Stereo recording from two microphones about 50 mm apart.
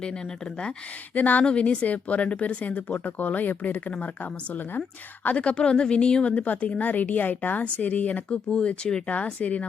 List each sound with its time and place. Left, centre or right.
1.1 s speech: left
1.5 s speech: left
8.4 s speech: centre
9.1 s speech: left